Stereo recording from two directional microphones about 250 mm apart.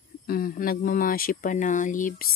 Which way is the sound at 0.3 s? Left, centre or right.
Left.